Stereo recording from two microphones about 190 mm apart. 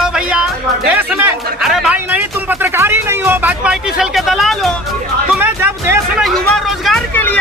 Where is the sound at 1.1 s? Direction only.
5° right (ahead or behind).